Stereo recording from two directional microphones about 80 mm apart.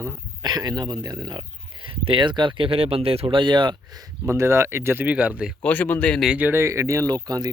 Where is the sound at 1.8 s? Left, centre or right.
Right.